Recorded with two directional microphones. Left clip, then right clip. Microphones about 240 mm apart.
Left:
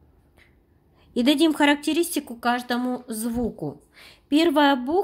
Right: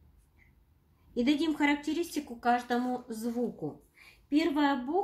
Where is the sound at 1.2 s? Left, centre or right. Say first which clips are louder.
Left 9 dB; left.